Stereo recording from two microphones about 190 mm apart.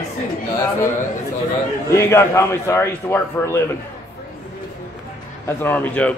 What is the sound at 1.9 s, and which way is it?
A man's voice, 15° left (ahead or behind).